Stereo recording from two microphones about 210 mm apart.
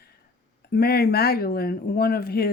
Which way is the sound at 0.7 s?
45° left (ahead or behind).